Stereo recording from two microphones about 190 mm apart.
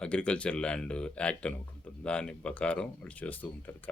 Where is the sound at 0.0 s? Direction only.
5° left (ahead or behind).